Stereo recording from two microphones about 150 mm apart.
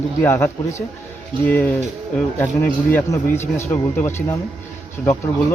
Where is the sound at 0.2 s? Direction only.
15° left (ahead or behind).